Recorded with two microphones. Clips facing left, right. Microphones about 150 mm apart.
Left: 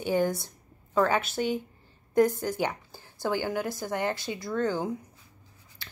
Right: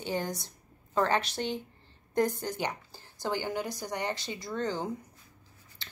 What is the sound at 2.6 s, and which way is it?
Speech, 10° left (ahead or behind).